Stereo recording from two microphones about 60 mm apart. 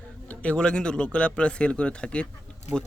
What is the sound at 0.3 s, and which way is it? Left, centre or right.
Speech, centre.